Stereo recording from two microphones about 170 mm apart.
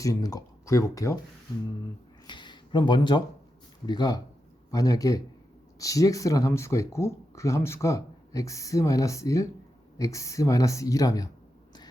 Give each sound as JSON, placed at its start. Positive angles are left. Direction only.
{"t": 0.0, "sound": "speech", "side_deg": 20}
{"t": 2.2, "sound": "a sound", "side_deg": 25}
{"t": 3.8, "sound": "speech", "side_deg": 25}